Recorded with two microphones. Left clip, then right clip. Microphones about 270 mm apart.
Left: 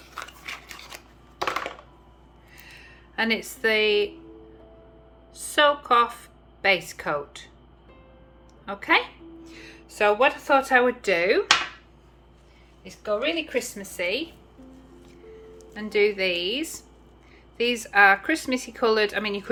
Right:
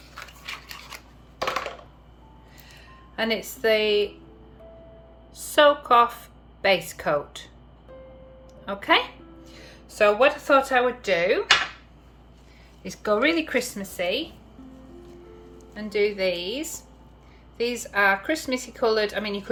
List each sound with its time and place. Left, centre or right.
0.1 s scissors: left
2.7 s speech: centre
5.3 s a woman's voice: centre
8.6 s a woman's voice: centre
12.8 s a woman's voice: centre
15.7 s a woman's voice: centre